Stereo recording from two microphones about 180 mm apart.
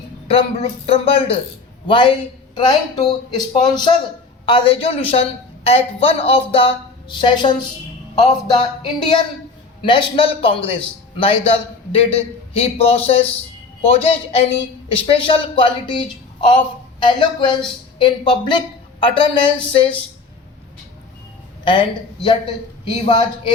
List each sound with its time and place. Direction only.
0.3 s a man's voice: 35° left (ahead or behind)
21.6 s a woman's voice: 30° left (ahead or behind)